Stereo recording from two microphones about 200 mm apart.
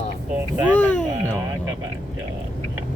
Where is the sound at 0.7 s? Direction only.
10° left (ahead or behind).